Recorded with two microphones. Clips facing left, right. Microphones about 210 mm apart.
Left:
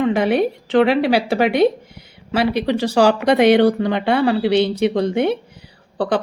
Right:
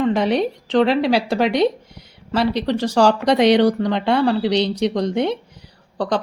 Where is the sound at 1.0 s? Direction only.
5° left (ahead or behind).